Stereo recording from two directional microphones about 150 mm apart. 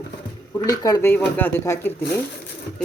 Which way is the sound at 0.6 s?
25° left (ahead or behind).